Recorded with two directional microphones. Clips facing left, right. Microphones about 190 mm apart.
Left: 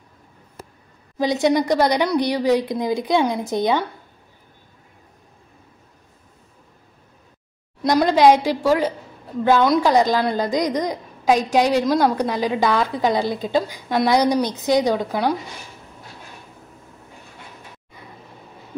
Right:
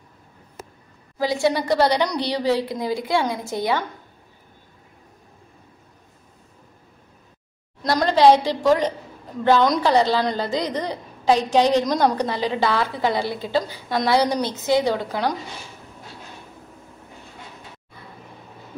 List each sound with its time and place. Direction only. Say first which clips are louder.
1.1 s a woman's voice: left 3 dB; 20° left (ahead or behind)
7.8 s a woman's voice: left 1 dB; 15° left (ahead or behind)